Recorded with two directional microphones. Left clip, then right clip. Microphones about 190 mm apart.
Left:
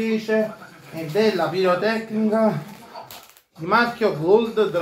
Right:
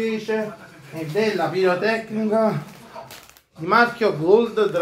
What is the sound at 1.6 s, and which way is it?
Speech, 40° right (ahead or behind).